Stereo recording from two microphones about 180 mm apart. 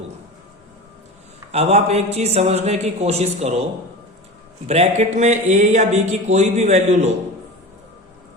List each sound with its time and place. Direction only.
1.5 s speech: 35° right (ahead or behind)
4.7 s speech: 40° right (ahead or behind)